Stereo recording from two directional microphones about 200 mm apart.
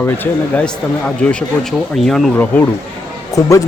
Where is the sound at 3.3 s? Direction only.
15° left (ahead or behind).